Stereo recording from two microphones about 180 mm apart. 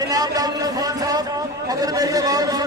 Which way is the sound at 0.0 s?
20° right (ahead or behind).